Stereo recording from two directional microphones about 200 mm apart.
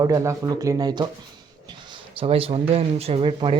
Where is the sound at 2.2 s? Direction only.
30° right (ahead or behind).